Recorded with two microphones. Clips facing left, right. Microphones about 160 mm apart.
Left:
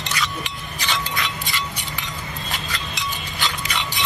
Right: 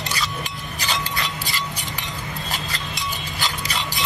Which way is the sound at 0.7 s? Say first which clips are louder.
Left 1 dB; 40° right (ahead or behind).